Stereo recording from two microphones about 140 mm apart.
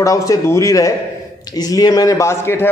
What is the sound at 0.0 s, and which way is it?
A man's voice, 25° left (ahead or behind).